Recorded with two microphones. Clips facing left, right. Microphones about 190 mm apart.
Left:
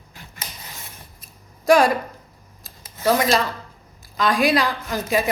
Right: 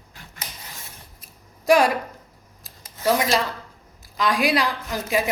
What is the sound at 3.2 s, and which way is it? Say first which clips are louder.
A woman's voice: left 2 dB; 10° right (ahead or behind).